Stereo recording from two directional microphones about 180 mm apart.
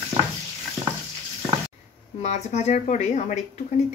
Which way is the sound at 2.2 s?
40° left (ahead or behind).